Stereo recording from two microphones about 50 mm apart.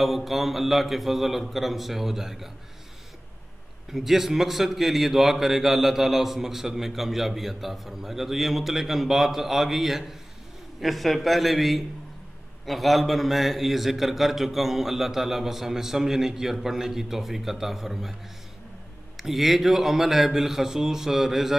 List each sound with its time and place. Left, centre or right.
0.0 s a man's voice: centre
3.9 s a man's voice: centre
19.1 s a man's voice: centre